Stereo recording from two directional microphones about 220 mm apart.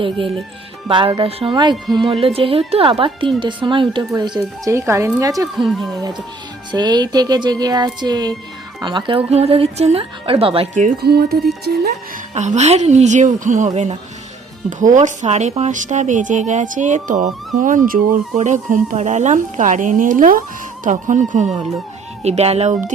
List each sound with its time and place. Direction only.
0.9 s a woman's voice: 20° right (ahead or behind)
5.5 s speech: centre (ahead or behind)
6.7 s a woman's voice: 20° right (ahead or behind)
11.0 s speech: 45° right (ahead or behind)
12.3 s a woman's voice: 30° right (ahead or behind)